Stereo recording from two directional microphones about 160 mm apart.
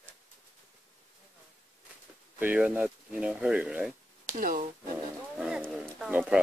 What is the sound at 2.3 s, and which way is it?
Speech, 10° right (ahead or behind).